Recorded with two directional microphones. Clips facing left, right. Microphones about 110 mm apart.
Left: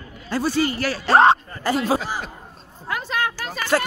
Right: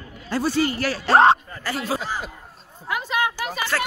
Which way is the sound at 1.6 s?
20° left (ahead or behind).